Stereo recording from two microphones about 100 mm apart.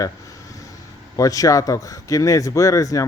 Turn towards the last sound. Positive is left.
turn(degrees=35)  # may be behind; listen again after turning